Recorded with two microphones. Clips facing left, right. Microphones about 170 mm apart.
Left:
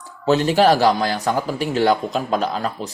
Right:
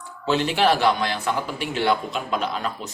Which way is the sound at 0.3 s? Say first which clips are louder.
Left 5 dB; 40° left (ahead or behind).